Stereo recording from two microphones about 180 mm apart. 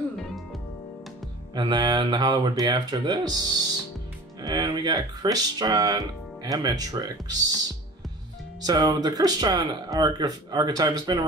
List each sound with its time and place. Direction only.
1.5 s speech: 25° right (ahead or behind)
8.6 s speech: 20° right (ahead or behind)